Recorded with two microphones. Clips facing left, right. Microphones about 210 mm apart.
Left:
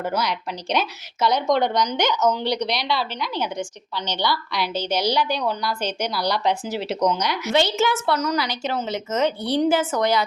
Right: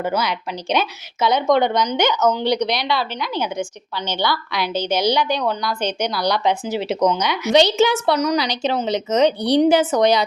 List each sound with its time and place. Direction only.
0.0 s speech: centre (ahead or behind)
7.8 s a woman's voice: 15° right (ahead or behind)
9.4 s a woman's voice: 75° right (ahead or behind)
9.6 s a woman's voice: 20° right (ahead or behind)